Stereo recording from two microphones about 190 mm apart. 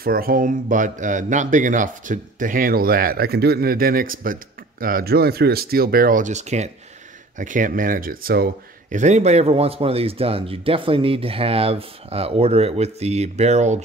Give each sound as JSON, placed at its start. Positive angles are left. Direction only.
{"t": 0.0, "sound": "speech", "side_deg": -50}
{"t": 8.9, "sound": "speech", "side_deg": -40}